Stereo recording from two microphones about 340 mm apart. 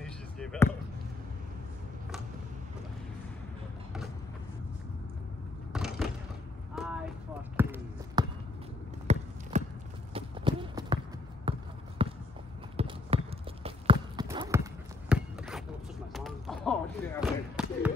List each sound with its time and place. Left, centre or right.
0.0 s basketball bounce: centre
5.7 s skateboard: centre
6.8 s clip-clop: centre
7.5 s basketball bounce: centre
9.0 s a sound: centre
16.1 s basketball bounce: centre